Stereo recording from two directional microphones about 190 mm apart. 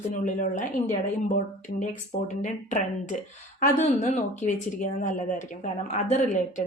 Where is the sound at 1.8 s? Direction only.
40° left (ahead or behind).